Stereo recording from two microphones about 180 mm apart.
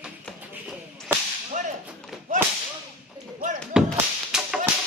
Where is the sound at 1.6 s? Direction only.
40° right (ahead or behind).